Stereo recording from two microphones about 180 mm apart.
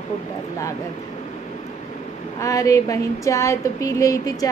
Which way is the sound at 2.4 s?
20° left (ahead or behind).